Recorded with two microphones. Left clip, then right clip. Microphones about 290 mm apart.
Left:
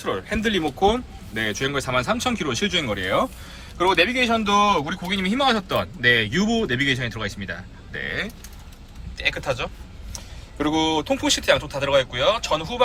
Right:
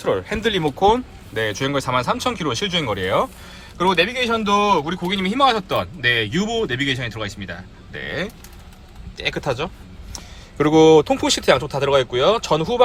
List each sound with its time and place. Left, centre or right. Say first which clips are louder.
0.0 s a man's voice: right 4 dB; centre
10.9 s a man's voice: right 7 dB; centre